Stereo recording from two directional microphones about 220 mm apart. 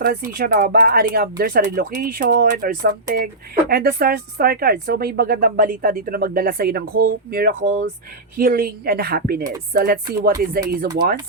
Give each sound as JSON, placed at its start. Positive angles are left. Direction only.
{"t": 0.0, "sound": "speech", "side_deg": -40}